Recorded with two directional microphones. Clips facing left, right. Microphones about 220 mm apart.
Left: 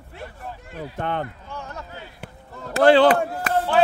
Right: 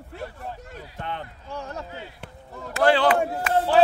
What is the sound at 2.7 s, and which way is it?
Speech, 25° left (ahead or behind).